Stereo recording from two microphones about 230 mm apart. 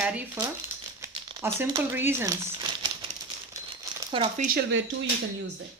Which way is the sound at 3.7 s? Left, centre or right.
Right.